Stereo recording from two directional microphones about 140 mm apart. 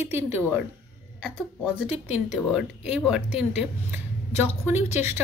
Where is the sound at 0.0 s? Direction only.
15° right (ahead or behind).